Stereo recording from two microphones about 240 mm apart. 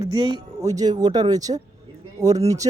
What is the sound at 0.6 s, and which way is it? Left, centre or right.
Speech, centre.